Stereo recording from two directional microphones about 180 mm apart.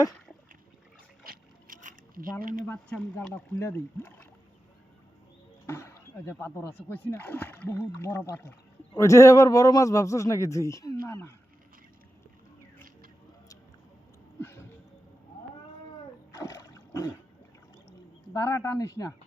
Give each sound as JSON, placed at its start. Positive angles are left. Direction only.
{"t": 1.2, "sound": "boat", "side_deg": -55}
{"t": 2.4, "sound": "speech", "side_deg": -50}
{"t": 2.6, "sound": "a man's voice", "side_deg": 5}
{"t": 5.6, "sound": "a man's voice", "side_deg": 15}
{"t": 16.5, "sound": "a sound", "side_deg": 15}
{"t": 18.3, "sound": "speech", "side_deg": 15}